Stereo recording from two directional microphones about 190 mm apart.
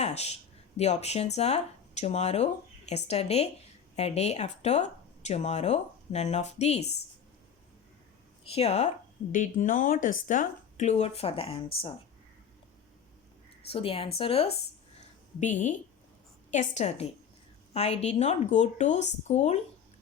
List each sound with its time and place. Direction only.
0.0 s a sound: 35° left (ahead or behind)
0.8 s a woman's voice: 35° left (ahead or behind)
8.4 s speech: 30° left (ahead or behind)
13.7 s a woman's voice: 30° left (ahead or behind)